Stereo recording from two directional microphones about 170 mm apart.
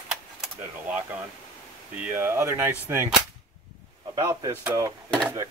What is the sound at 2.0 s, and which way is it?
Speech, 10° right (ahead or behind).